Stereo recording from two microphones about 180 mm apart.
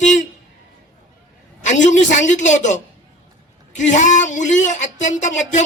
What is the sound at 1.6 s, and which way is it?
Speech, 40° left (ahead or behind).